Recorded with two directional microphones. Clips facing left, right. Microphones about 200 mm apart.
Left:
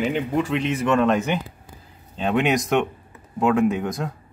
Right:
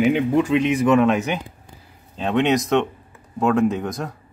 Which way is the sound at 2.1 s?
5° left (ahead or behind).